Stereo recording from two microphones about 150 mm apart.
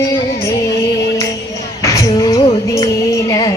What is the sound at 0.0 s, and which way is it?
Music, 20° left (ahead or behind).